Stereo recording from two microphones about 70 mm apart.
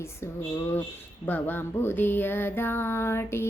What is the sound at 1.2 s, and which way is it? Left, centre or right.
Speech, left.